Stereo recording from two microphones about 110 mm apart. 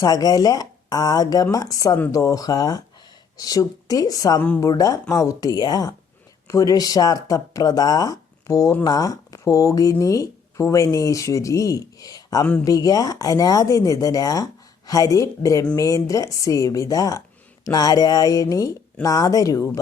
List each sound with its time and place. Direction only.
0.0 s speech: 35° left (ahead or behind)
4.4 s a woman's voice: 15° left (ahead or behind)
4.6 s speech: 30° left (ahead or behind)